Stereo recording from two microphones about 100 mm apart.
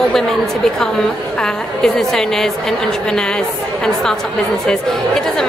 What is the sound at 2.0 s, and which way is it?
Speech, 5° left (ahead or behind).